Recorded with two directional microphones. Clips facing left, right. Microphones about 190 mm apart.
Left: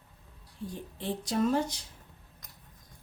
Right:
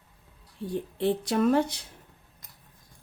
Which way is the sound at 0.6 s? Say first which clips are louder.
Right 9 dB; 65° right (ahead or behind).